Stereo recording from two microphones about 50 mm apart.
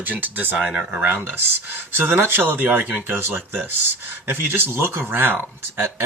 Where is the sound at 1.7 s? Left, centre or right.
Right.